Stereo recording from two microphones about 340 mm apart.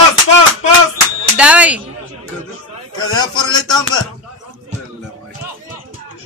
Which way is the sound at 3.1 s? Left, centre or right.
Centre.